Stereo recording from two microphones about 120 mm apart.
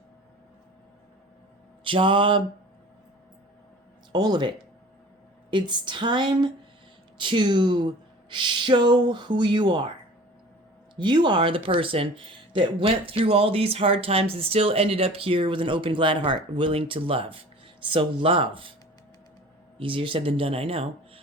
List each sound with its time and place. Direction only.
1.8 s mantra: 45° right (ahead or behind)
4.1 s speech: 35° right (ahead or behind)
10.9 s speech: 40° right (ahead or behind)
19.8 s speech: 45° right (ahead or behind)